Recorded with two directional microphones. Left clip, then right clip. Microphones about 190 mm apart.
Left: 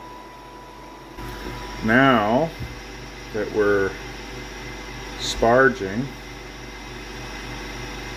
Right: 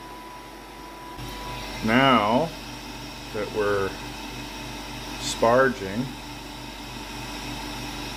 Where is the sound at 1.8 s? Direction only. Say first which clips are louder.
Left 2 dB; 15° left (ahead or behind).